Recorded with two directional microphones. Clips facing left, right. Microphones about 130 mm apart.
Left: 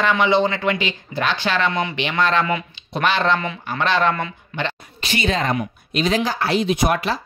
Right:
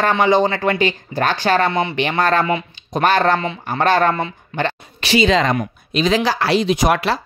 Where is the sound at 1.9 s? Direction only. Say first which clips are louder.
Right 3 dB; 45° right (ahead or behind).